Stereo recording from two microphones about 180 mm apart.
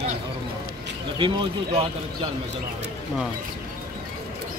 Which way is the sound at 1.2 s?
30° right (ahead or behind).